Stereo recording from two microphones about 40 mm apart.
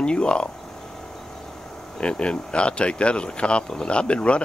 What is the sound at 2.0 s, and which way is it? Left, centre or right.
Speech, left.